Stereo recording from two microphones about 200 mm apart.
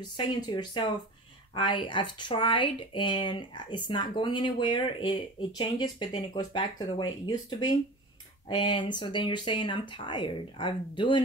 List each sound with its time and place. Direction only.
0.4 s speech: 20° left (ahead or behind)